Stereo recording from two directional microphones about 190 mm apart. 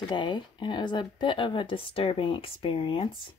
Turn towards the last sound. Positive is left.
turn(degrees=30)  # may be behind; listen again after turning